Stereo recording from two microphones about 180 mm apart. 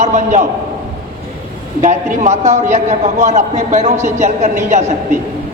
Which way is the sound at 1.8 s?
40° right (ahead or behind).